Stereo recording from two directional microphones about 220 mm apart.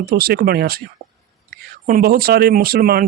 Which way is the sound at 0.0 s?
45° right (ahead or behind).